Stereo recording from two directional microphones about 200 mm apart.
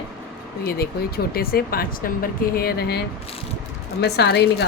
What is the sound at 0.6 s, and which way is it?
Speech, 50° left (ahead or behind).